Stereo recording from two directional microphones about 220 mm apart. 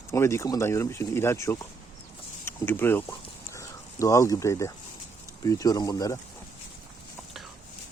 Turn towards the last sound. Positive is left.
turn(degrees=15)  # may be behind; listen again after turning